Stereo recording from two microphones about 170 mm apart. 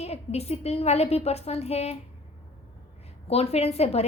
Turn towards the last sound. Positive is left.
turn(degrees=40)  # may be behind; listen again after turning